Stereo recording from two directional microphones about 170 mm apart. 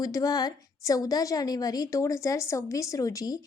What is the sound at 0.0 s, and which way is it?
A woman's voice, 20° left (ahead or behind).